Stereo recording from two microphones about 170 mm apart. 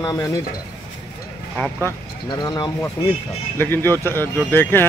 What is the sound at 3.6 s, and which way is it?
A man's voice, 15° left (ahead or behind).